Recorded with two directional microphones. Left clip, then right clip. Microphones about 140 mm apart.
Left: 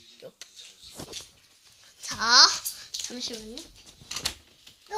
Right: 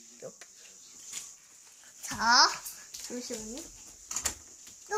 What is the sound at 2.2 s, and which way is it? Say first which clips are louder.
Speech: left 4 dB; 35° left (ahead or behind).